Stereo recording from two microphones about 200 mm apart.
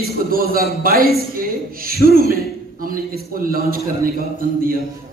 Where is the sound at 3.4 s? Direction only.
45° right (ahead or behind).